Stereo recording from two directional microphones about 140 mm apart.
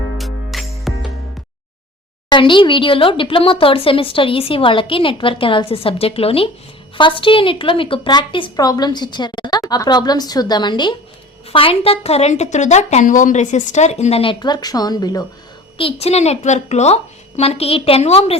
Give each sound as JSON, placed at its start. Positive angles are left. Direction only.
{"t": 0.2, "sound": "music", "side_deg": 0}
{"t": 2.3, "sound": "a woman's voice", "side_deg": 35}
{"t": 15.8, "sound": "a woman's voice", "side_deg": 45}